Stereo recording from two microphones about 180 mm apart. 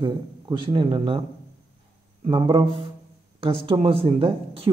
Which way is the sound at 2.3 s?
30° right (ahead or behind).